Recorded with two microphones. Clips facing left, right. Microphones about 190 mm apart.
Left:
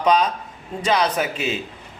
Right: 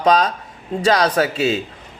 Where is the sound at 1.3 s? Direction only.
35° right (ahead or behind).